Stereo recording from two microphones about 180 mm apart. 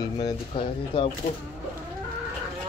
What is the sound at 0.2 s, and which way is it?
Speech, 30° left (ahead or behind).